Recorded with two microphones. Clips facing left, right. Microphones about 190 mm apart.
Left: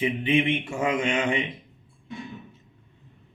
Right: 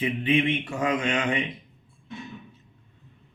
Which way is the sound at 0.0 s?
25° left (ahead or behind).